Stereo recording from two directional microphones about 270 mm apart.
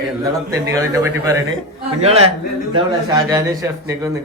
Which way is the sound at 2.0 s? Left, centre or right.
Right.